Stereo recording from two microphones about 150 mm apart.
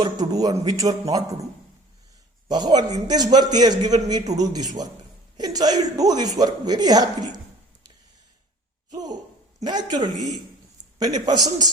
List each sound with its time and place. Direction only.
0.0 s speech: 25° right (ahead or behind)
2.5 s speech: 30° right (ahead or behind)
8.9 s speech: 25° right (ahead or behind)